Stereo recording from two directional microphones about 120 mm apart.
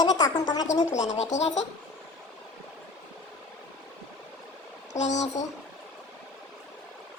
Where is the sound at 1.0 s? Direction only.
85° left; by 1.6 s 70° left (ahead or behind).